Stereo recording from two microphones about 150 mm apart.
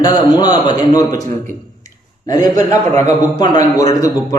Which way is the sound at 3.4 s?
30° left (ahead or behind).